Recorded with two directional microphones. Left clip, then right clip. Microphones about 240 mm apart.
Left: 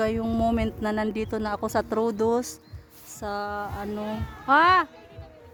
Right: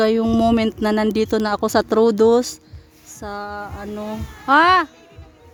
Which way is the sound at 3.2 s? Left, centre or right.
Centre.